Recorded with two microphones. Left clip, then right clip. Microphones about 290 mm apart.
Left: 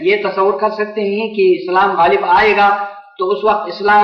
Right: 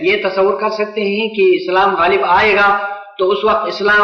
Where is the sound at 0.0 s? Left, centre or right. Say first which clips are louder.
Even; left.